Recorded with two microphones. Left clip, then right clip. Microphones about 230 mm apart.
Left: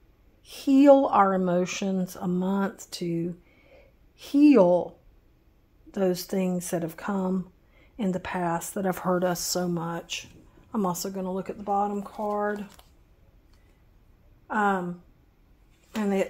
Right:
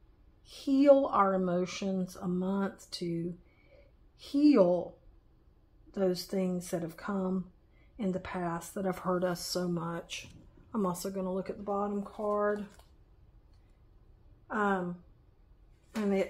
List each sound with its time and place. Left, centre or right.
0.4 s speech: left
5.9 s speech: left
14.5 s speech: left
15.9 s speech: left